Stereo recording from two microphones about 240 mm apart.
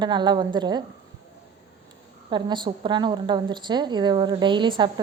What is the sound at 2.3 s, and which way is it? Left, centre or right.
A woman's voice, centre.